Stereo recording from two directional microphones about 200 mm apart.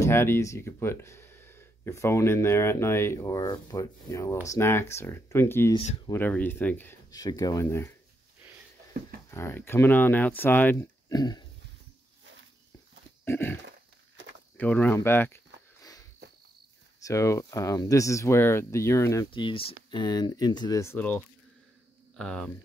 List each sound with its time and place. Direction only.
0.0 s speech: 10° left (ahead or behind)
9.3 s speech: 10° left (ahead or behind)
13.2 s a sound: 10° left (ahead or behind)
14.6 s speech: 5° left (ahead or behind)
15.8 s a sound: 20° left (ahead or behind)
17.0 s speech: 15° left (ahead or behind)